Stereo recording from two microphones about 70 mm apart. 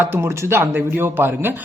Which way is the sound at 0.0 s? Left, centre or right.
Right.